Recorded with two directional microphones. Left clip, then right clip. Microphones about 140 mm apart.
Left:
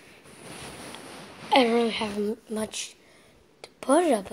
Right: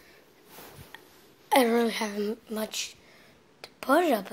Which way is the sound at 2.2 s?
20° left (ahead or behind).